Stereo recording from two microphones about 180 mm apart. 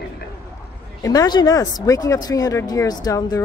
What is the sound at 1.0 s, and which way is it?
Speech, 20° left (ahead or behind).